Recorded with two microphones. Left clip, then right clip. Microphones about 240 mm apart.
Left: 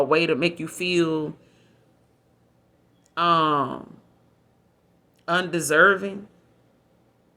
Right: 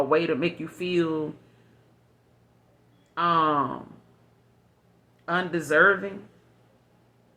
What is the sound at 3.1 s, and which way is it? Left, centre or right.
Speech, left.